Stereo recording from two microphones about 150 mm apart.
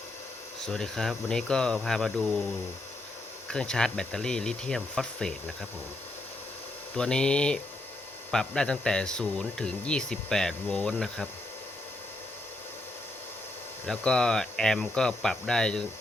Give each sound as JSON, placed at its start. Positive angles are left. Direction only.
{"t": 0.6, "sound": "speech", "side_deg": 5}
{"t": 3.5, "sound": "speech", "side_deg": 5}
{"t": 6.9, "sound": "speech", "side_deg": 5}
{"t": 13.8, "sound": "speech", "side_deg": 5}